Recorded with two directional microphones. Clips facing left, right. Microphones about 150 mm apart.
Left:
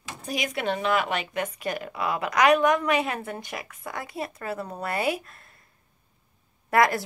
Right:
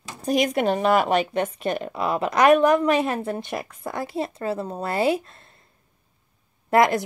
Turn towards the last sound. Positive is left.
turn(degrees=-20)  # may be behind; listen again after turning